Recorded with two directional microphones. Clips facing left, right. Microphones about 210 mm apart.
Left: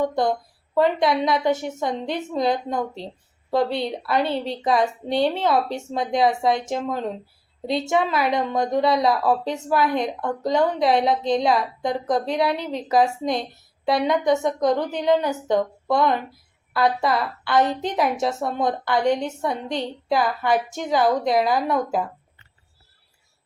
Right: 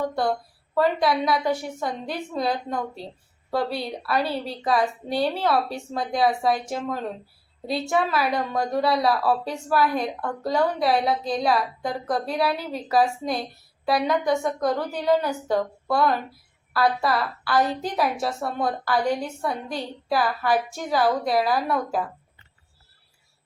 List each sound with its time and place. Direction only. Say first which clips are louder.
0.0 s a woman's voice: left 3 dB; 20° left (ahead or behind)
2.7 s speech: left 3 dB; 5° right (ahead or behind)
3.5 s a woman's voice: left 4 dB; 20° left (ahead or behind)
7.9 s a woman's voice: left 1 dB; 20° left (ahead or behind)